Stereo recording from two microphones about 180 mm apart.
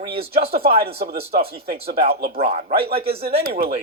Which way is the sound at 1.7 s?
35° right (ahead or behind).